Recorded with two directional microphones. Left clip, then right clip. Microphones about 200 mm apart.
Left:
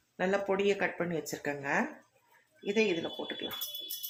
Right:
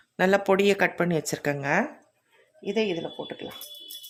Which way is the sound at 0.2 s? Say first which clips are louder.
Right 9 dB; 60° right (ahead or behind).